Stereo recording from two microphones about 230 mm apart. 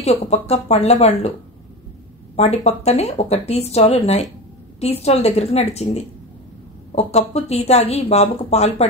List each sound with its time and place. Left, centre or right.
0.0 s speech: left
2.3 s speech: left